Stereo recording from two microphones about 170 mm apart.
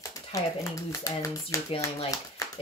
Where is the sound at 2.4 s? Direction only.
20° left (ahead or behind).